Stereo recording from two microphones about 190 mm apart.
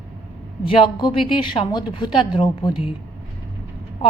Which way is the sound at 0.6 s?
25° left (ahead or behind).